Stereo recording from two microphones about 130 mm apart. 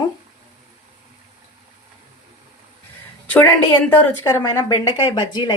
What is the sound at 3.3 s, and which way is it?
Speech, 10° left (ahead or behind).